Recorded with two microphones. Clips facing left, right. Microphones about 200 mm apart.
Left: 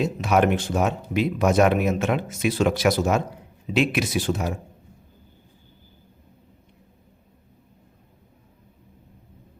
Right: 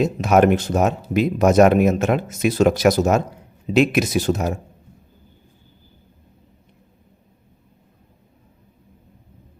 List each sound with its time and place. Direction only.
0.0 s speech: 45° right (ahead or behind)